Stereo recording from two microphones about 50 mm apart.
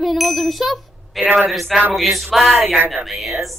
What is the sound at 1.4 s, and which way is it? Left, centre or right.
Speech, centre.